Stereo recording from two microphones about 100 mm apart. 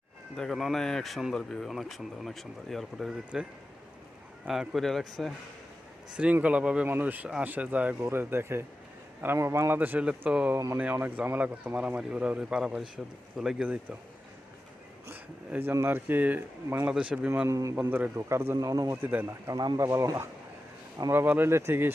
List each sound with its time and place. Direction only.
0.3 s speech: centre (ahead or behind)
4.4 s speech: 5° right (ahead or behind)
6.1 s speech: 10° right (ahead or behind)
15.0 s speech: 20° right (ahead or behind)
17.5 s speech: 30° right (ahead or behind)
17.7 s speech: 20° right (ahead or behind)
18.5 s speech: 40° right (ahead or behind)
19.0 s speech: 20° right (ahead or behind)
19.3 s speech: 35° right (ahead or behind)
21.1 s speech: 20° right (ahead or behind)